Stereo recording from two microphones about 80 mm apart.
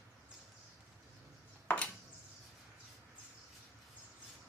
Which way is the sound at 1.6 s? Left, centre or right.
Centre.